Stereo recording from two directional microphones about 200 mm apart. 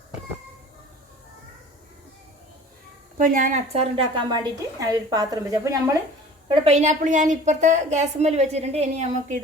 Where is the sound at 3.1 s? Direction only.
40° right (ahead or behind); by 6.0 s 15° right (ahead or behind).